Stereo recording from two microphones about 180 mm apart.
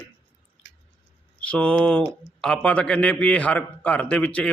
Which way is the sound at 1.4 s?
5° left (ahead or behind).